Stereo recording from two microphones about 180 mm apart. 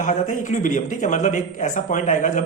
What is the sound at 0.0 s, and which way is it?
A man's voice, 45° left (ahead or behind).